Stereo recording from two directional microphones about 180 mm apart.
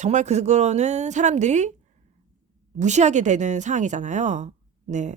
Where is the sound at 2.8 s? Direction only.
40° right (ahead or behind).